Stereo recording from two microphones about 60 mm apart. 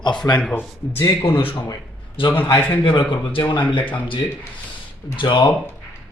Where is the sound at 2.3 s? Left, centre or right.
Left.